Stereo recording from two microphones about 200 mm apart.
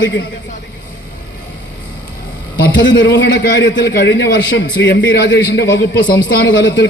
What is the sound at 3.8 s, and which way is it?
A man's voice, 60° left (ahead or behind).